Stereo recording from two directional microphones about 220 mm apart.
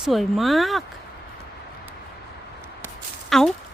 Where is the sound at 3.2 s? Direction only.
Centre (ahead or behind).